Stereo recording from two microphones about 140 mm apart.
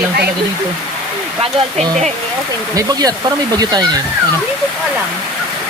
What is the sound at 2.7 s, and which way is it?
Speech, 25° right (ahead or behind).